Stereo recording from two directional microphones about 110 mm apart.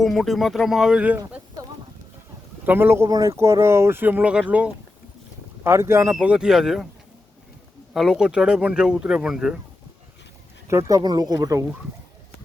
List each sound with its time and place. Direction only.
0.0 s speech: centre (ahead or behind)
2.6 s speech: 20° right (ahead or behind)
5.6 s speech: 25° right (ahead or behind)
6.1 s speech: 10° right (ahead or behind)
7.9 s speech: 5° right (ahead or behind)
10.7 s speech: 30° right (ahead or behind)